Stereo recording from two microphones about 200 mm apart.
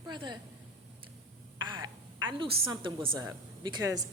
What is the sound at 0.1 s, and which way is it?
Speech, 20° right (ahead or behind).